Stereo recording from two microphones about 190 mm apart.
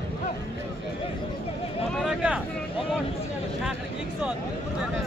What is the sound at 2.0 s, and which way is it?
Vehicle, 5° right (ahead or behind).